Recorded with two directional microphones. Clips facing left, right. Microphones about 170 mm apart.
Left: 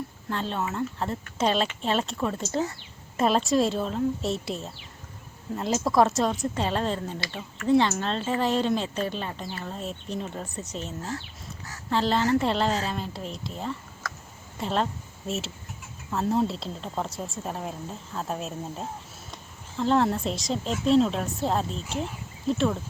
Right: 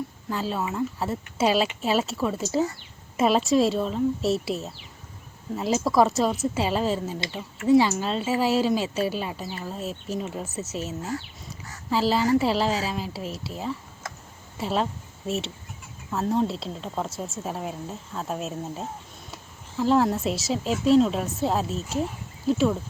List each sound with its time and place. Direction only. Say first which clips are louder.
0.3 s a woman's voice: right 1 dB; 5° right (ahead or behind)
14.0 s a sound: even; 25° right (ahead or behind)
14.6 s a woman's voice: right 1 dB; centre (ahead or behind)